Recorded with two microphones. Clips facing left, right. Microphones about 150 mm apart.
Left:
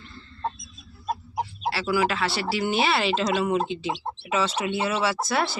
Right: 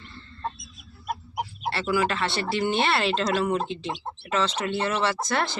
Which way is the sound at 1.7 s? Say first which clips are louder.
Even; 5° left (ahead or behind).